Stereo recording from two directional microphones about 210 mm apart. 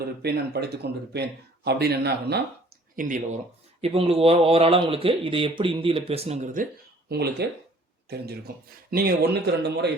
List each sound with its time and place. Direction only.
0.0 s speech: 50° right (ahead or behind)
2.9 s speech: 40° right (ahead or behind)
3.8 s speech: 30° right (ahead or behind)
7.1 s speech: 50° right (ahead or behind)
8.9 s speech: 45° right (ahead or behind)